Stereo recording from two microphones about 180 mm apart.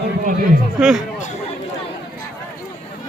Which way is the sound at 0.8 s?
5° right (ahead or behind).